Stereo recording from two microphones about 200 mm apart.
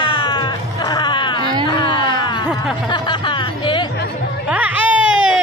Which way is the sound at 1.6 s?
20° left (ahead or behind).